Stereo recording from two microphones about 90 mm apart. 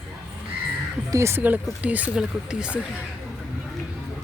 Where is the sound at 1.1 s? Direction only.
30° right (ahead or behind); by 3.0 s 15° right (ahead or behind).